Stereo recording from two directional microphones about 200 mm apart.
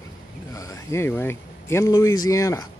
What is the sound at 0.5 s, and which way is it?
Speech, 15° left (ahead or behind).